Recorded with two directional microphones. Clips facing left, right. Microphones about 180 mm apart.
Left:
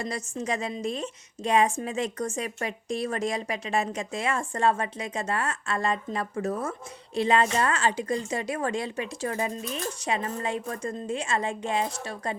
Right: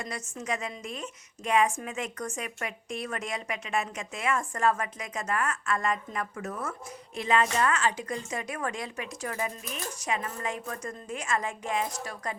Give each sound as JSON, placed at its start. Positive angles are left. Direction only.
{"t": 0.0, "sound": "a woman's voice", "side_deg": 30}